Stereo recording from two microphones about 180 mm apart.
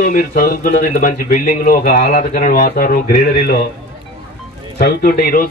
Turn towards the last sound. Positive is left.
turn(degrees=55)  # may be behind; listen again after turning